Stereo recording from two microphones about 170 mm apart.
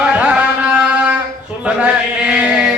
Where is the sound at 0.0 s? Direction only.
5° right (ahead or behind).